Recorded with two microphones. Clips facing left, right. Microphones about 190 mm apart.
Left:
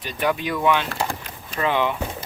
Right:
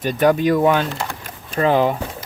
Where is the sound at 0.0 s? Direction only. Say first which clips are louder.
Right 8 dB; 45° right (ahead or behind).